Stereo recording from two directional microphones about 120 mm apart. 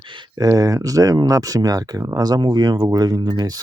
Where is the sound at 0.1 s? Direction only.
30° right (ahead or behind).